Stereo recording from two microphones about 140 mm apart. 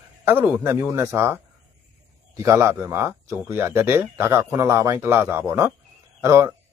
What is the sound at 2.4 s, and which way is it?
Speech, 20° right (ahead or behind).